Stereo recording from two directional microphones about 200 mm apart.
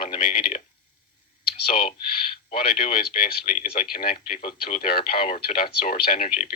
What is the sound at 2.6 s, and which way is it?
Speech, 50° left (ahead or behind).